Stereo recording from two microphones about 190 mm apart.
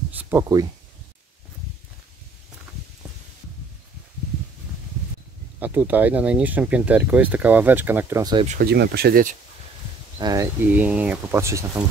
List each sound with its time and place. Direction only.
0.1 s speech: 10° right (ahead or behind)
5.6 s speech: 10° right (ahead or behind)
8.5 s speech: 50° right (ahead or behind)
10.1 s speech: 20° right (ahead or behind)